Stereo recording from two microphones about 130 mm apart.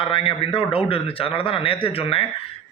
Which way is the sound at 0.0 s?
45° left (ahead or behind).